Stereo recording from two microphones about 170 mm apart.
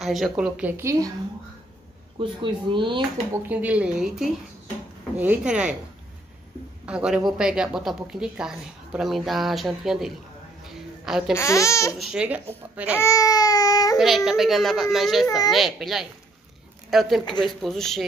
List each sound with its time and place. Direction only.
0.0 s a woman's voice: centre (ahead or behind); by 1.1 s 20° right (ahead or behind)
2.1 s speech: 30° right (ahead or behind)
3.4 s a woman's voice: 10° right (ahead or behind)
6.9 s speech: 5° right (ahead or behind)
10.6 s a sound: centre (ahead or behind)
11.3 s speech: 15° left (ahead or behind)
12.0 s a woman's voice: 5° right (ahead or behind)
13.0 s baby cry: 20° left (ahead or behind)
13.9 s speech: centre (ahead or behind)
15.2 s a child's voice: 20° left (ahead or behind)
15.5 s speech: centre (ahead or behind)